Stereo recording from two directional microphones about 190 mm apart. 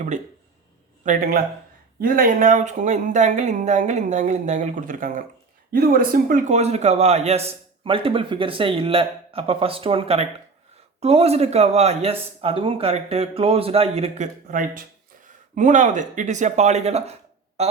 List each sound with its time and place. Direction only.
1.0 s a man's voice: 45° right (ahead or behind)
14.4 s a man's voice: 45° right (ahead or behind)